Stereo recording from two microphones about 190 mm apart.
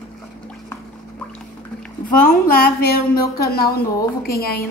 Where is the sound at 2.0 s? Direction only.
50° left (ahead or behind).